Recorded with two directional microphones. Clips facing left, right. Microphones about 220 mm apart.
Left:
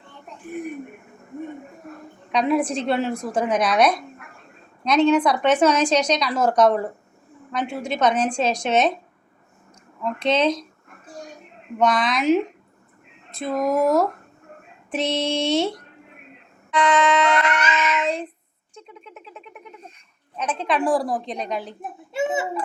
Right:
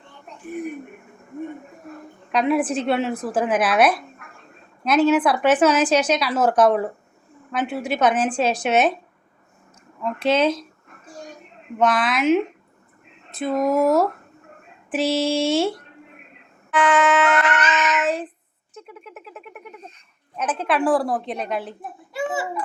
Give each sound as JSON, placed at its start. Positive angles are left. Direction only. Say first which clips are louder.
{"t": 2.3, "sound": "speech", "louder": "right 1 dB", "side_deg": 0}
{"t": 10.0, "sound": "speech", "louder": "right 1 dB", "side_deg": -5}
{"t": 11.8, "sound": "speech", "louder": "right 1 dB", "side_deg": -5}
{"t": 16.7, "sound": "a sound", "louder": "right 1 dB", "side_deg": -5}
{"t": 17.6, "sound": "child singing", "louder": "right 1 dB", "side_deg": 10}
{"t": 18.0, "sound": "speech", "louder": "right 1 dB", "side_deg": -5}
{"t": 18.7, "sound": "a sound", "louder": "right 3 dB", "side_deg": -5}
{"t": 20.3, "sound": "speech", "louder": "right 1 dB", "side_deg": -5}
{"t": 22.1, "sound": "a child's voice", "louder": "left 2 dB", "side_deg": 25}